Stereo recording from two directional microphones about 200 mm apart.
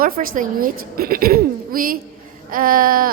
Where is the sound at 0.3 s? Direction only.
45° right (ahead or behind).